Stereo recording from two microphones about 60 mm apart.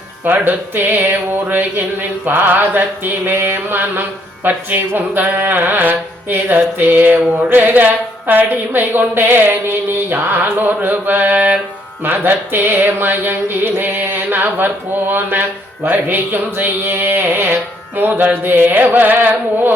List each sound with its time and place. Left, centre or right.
0.3 s music: right